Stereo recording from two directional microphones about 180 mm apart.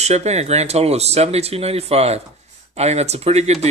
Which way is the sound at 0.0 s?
40° right (ahead or behind).